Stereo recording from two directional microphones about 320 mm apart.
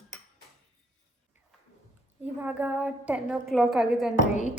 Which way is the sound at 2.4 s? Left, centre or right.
Centre.